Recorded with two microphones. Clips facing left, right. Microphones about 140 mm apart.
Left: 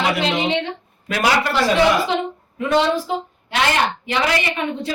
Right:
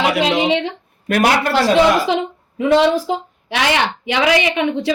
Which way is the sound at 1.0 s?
55° right (ahead or behind).